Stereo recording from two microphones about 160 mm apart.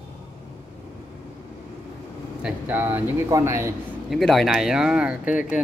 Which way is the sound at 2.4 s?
10° right (ahead or behind).